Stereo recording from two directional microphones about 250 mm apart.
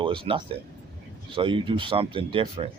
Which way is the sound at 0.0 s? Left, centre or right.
Right.